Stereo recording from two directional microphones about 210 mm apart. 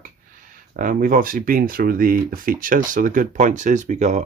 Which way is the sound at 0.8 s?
40° right (ahead or behind).